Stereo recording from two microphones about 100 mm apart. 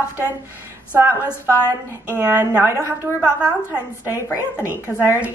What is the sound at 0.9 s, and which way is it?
A woman's voice, 15° right (ahead or behind).